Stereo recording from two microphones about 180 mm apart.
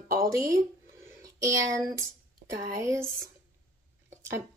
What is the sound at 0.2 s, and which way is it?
Speech, 20° right (ahead or behind).